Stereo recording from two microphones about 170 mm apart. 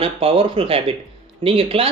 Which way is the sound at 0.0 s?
35° right (ahead or behind).